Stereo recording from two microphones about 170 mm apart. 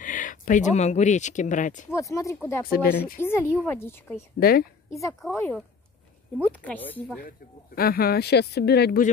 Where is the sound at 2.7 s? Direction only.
65° left (ahead or behind).